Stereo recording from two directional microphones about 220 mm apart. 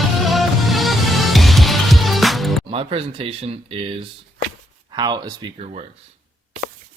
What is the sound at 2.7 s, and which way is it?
Speech, 25° right (ahead or behind).